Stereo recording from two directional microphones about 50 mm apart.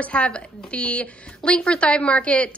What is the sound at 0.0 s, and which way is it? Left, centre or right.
A woman's voice, left.